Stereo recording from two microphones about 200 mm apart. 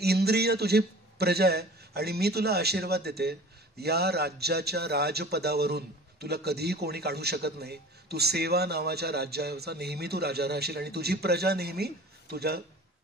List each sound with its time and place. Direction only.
0.0 s a man's voice: 55° right (ahead or behind)